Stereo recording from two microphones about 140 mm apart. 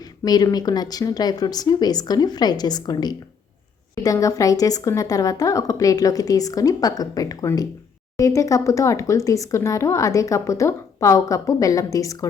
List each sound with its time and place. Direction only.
0.0 s speech: 25° left (ahead or behind)